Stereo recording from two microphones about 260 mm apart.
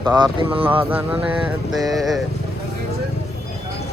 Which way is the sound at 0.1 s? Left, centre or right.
Centre.